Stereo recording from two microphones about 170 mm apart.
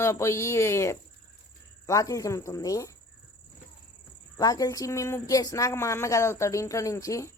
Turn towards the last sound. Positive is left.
turn(degrees=20)  # may be behind; listen again after turning